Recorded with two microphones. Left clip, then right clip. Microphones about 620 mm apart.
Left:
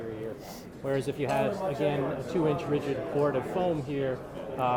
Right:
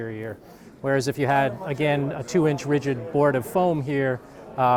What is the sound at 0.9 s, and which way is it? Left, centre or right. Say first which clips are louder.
Speech: right 7 dB; right.